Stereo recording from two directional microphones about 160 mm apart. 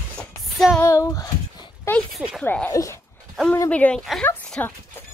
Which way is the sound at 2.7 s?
20° left (ahead or behind).